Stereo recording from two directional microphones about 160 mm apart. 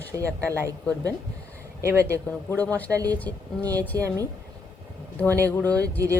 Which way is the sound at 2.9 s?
20° right (ahead or behind).